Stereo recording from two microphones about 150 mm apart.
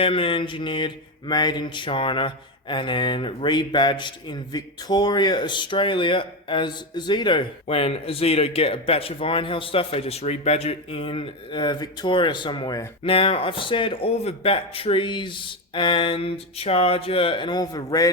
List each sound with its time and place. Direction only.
0.0 s mantra: 35° left (ahead or behind)